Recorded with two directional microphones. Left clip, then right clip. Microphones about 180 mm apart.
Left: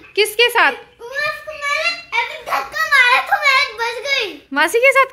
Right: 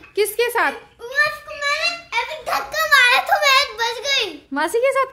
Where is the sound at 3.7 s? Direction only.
20° right (ahead or behind).